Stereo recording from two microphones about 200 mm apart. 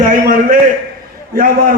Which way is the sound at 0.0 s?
45° right (ahead or behind).